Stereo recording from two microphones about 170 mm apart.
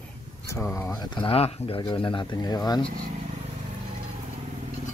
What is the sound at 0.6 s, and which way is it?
Speech, 5° left (ahead or behind).